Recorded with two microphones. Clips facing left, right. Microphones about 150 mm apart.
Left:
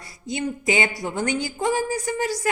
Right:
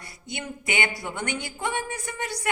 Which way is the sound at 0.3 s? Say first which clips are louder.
Left 8 dB; 30° left (ahead or behind).